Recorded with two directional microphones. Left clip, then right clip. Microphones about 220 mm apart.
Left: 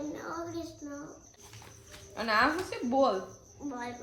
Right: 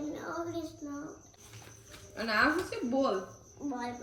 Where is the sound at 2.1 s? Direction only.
45° left (ahead or behind).